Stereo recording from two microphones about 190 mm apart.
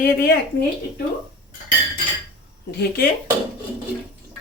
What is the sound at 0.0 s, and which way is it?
Speech, 55° left (ahead or behind).